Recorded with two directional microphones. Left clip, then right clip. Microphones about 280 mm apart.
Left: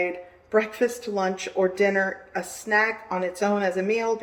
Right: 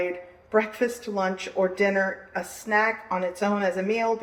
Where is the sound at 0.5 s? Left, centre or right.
Centre.